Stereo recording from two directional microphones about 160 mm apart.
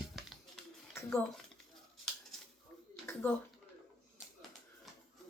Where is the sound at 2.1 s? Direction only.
5° left (ahead or behind).